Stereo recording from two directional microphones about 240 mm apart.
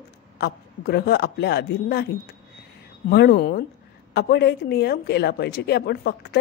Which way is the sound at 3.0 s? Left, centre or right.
Left.